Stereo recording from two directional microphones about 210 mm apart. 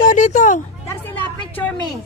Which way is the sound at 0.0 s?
35° left (ahead or behind).